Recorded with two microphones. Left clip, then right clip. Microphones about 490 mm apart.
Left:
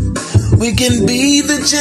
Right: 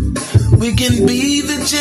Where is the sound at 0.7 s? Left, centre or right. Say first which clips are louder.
Left 1 dB; right.